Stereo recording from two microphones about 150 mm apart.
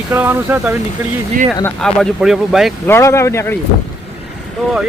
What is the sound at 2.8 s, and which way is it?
Speech, 15° left (ahead or behind).